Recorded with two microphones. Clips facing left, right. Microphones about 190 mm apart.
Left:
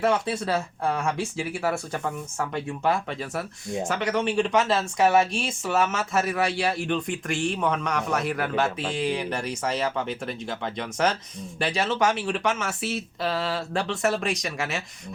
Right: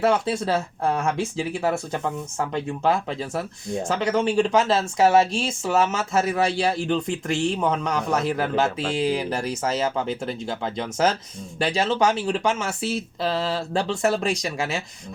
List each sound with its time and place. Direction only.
0.0 s speech: 30° right (ahead or behind)